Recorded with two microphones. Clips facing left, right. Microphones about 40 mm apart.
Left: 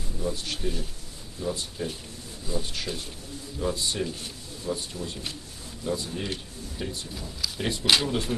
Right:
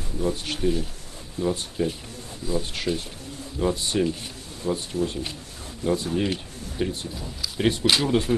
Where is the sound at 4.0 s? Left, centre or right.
Right.